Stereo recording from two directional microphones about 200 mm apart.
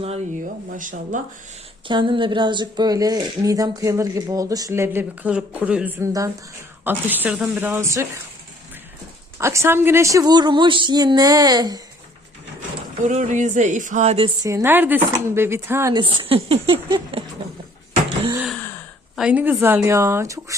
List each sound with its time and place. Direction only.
0.0 s speech: 30° right (ahead or behind)
1.9 s speech: 25° right (ahead or behind)
9.4 s a woman's voice: 15° right (ahead or behind)
13.0 s speech: 40° right (ahead or behind)
14.4 s a woman's voice: 15° right (ahead or behind)
19.1 s speech: 5° right (ahead or behind)